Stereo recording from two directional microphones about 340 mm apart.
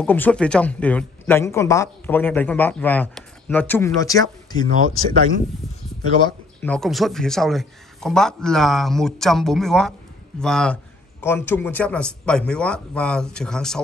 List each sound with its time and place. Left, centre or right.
0.0 s speech: centre
6.2 s speech: centre